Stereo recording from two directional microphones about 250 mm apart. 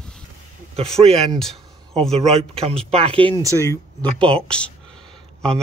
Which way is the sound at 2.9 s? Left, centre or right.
Right.